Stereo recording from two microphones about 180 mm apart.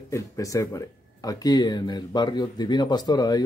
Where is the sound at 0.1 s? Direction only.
20° left (ahead or behind).